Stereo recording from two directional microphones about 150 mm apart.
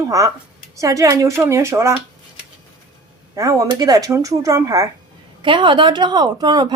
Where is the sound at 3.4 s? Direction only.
20° right (ahead or behind).